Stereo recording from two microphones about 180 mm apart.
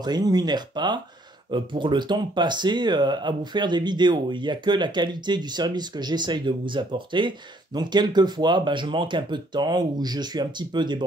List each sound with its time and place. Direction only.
0.0 s speech: 20° right (ahead or behind)